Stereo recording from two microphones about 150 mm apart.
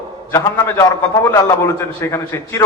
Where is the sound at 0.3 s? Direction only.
20° left (ahead or behind).